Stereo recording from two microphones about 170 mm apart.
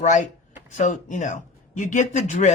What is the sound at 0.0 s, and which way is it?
A man's voice, 45° left (ahead or behind).